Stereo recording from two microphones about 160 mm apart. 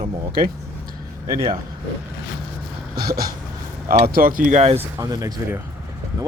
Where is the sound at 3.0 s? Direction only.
70° right (ahead or behind).